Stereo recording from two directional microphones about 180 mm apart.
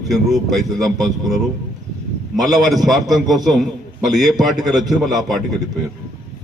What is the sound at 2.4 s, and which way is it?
Speech, 20° right (ahead or behind).